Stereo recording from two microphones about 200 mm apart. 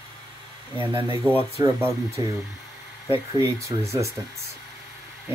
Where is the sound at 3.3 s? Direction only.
15° right (ahead or behind).